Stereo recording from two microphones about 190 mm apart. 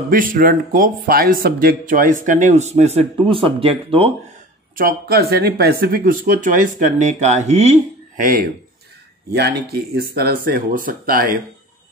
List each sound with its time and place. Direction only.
0.1 s speech: 45° right (ahead or behind); by 4.1 s 30° right (ahead or behind)
4.7 s speech: 50° right (ahead or behind)
9.3 s speech: 60° right (ahead or behind)